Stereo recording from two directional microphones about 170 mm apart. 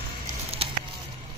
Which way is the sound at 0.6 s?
35° right (ahead or behind).